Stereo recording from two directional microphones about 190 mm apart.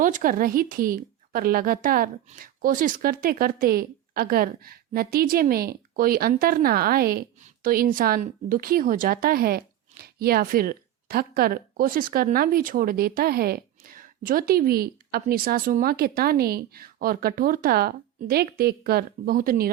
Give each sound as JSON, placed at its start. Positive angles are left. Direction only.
{"t": 0.0, "sound": "a woman's voice", "side_deg": -45}